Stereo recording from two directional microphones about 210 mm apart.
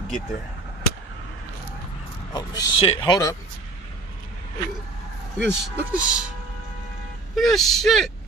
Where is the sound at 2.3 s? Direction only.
20° left (ahead or behind).